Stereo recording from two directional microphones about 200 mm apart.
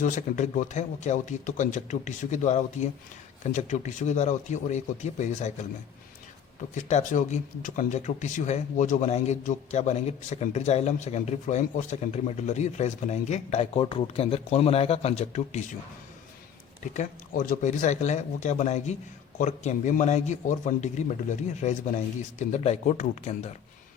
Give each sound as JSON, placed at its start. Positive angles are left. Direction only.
{"t": 0.0, "sound": "speech", "side_deg": 40}
{"t": 6.7, "sound": "speech", "side_deg": 40}
{"t": 16.8, "sound": "speech", "side_deg": 40}